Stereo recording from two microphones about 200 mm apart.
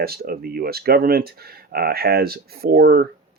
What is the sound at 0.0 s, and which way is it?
Speech, 50° right (ahead or behind).